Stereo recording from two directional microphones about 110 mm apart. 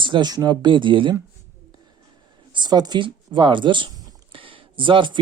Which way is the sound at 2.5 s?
40° right (ahead or behind).